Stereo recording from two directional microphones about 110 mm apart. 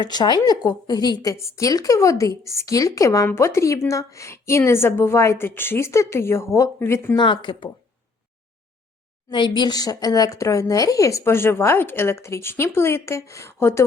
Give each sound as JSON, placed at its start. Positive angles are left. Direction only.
{"t": 0.0, "sound": "a woman's voice", "side_deg": 40}
{"t": 7.2, "sound": "speech", "side_deg": 45}
{"t": 9.3, "sound": "a woman's voice", "side_deg": 45}